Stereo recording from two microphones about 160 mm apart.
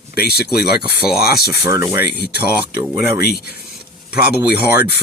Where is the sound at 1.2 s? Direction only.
75° left (ahead or behind).